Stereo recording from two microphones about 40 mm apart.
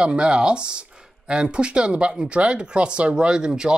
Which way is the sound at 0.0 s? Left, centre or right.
Right.